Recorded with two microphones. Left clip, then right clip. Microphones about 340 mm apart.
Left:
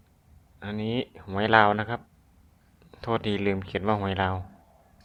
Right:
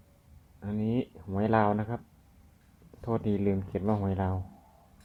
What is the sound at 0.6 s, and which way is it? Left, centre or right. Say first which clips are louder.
Speech: left 2 dB; left.